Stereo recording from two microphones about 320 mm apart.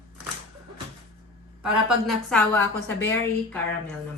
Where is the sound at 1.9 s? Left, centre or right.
Centre.